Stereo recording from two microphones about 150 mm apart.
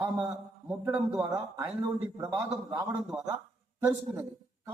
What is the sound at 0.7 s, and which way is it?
Speech, 10° right (ahead or behind).